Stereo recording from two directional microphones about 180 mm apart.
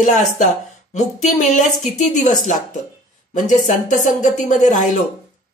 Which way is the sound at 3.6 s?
45° left (ahead or behind).